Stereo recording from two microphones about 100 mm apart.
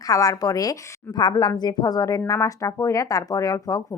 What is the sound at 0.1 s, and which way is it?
A woman's voice, 35° left (ahead or behind).